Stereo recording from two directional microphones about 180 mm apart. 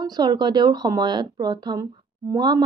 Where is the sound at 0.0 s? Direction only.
20° right (ahead or behind).